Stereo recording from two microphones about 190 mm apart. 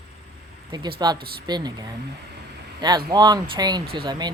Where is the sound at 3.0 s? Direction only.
20° right (ahead or behind).